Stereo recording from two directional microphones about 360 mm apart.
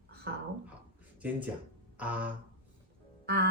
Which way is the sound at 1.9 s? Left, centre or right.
Centre.